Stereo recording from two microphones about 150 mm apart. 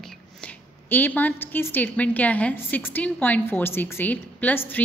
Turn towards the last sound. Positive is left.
turn(degrees=10)  # may be behind; listen again after turning